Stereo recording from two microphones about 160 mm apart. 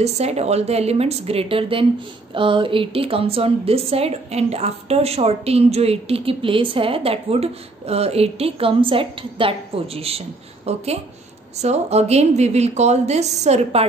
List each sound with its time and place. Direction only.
0.0 s a woman's voice: 40° right (ahead or behind)